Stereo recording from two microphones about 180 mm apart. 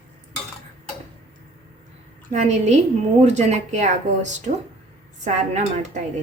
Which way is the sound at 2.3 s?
40° right (ahead or behind).